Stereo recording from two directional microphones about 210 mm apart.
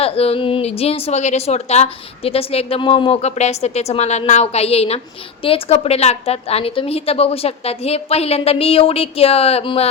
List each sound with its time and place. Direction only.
0.0 s a woman's voice: 30° left (ahead or behind)